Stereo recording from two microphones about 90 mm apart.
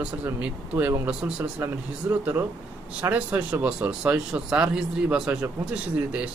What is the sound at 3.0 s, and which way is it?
Speech, 30° right (ahead or behind).